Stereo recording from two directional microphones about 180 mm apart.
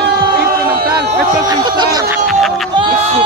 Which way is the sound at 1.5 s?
25° right (ahead or behind).